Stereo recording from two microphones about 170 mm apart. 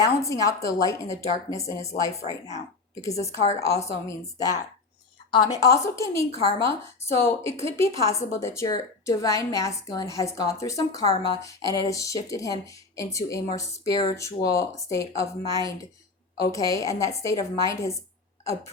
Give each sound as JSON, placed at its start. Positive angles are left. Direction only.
{"t": 0.0, "sound": "a woman's voice", "side_deg": 15}
{"t": 3.4, "sound": "a woman's voice", "side_deg": 40}
{"t": 3.8, "sound": "a woman's voice", "side_deg": 15}